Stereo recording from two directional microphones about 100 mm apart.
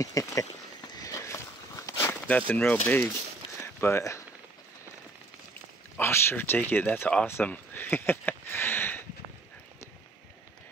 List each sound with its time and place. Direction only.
0.0 s speech: 30° left (ahead or behind)
0.9 s walk: 35° left (ahead or behind)
2.2 s speech: 15° left (ahead or behind)
3.8 s speech: 30° left (ahead or behind)
5.9 s speech: 25° left (ahead or behind)
7.2 s a sound: 20° left (ahead or behind)